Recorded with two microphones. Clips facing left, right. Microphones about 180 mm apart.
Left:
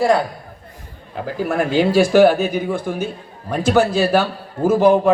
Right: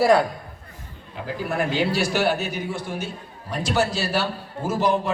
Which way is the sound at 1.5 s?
45° left (ahead or behind).